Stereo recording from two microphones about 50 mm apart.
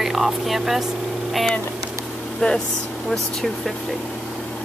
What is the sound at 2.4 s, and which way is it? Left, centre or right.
Speech, left.